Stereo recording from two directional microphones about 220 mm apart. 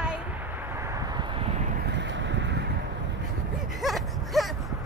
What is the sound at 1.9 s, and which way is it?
Boat, 55° right (ahead or behind).